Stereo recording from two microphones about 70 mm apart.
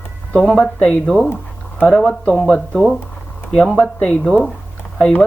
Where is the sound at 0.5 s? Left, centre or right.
Centre.